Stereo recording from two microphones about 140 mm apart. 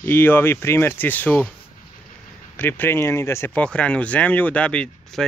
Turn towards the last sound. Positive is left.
turn(degrees=5)  # may be behind; listen again after turning